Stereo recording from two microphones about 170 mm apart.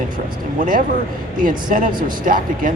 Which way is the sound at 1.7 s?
55° right (ahead or behind).